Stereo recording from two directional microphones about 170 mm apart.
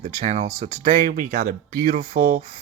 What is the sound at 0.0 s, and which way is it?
Speech, 45° right (ahead or behind).